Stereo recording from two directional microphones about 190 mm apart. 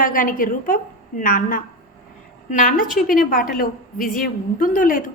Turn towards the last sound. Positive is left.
turn(degrees=45)  # may be behind; listen again after turning